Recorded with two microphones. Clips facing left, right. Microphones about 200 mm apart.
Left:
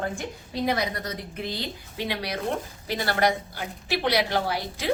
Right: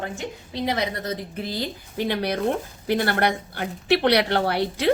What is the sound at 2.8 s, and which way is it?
A woman's voice, 60° right (ahead or behind).